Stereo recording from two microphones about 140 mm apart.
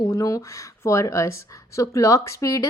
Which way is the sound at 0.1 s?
25° left (ahead or behind).